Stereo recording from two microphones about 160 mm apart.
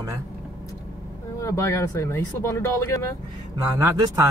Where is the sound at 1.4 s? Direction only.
20° left (ahead or behind).